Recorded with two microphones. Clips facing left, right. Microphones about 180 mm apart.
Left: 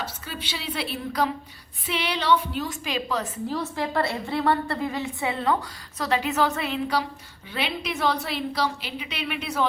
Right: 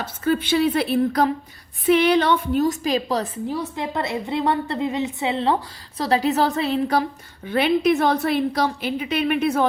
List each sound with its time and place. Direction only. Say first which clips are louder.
0.0 s a woman's voice: right 12 dB; 50° right (ahead or behind)
3.4 s a woman's voice: right 2 dB; 20° right (ahead or behind)
6.0 s a woman's voice: right 4 dB; 35° right (ahead or behind)